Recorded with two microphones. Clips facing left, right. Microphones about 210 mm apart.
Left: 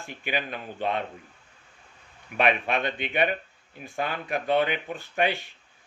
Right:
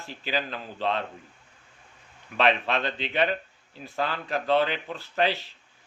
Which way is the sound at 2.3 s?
15° left (ahead or behind).